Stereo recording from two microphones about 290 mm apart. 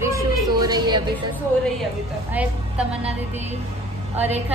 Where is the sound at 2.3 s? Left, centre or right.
Centre.